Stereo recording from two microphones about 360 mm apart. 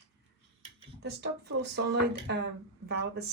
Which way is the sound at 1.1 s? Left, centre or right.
Right.